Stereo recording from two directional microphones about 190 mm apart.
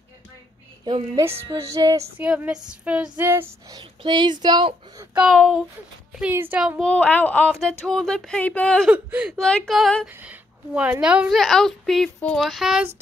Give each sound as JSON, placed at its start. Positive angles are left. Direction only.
{"t": 0.8, "sound": "a woman's voice", "side_deg": -25}
{"t": 2.2, "sound": "speech", "side_deg": -5}
{"t": 5.1, "sound": "a woman's voice", "side_deg": 0}
{"t": 6.1, "sound": "speech", "side_deg": -10}
{"t": 6.8, "sound": "a woman's voice", "side_deg": 5}
{"t": 8.9, "sound": "speech", "side_deg": -5}
{"t": 9.4, "sound": "a woman's voice", "side_deg": 5}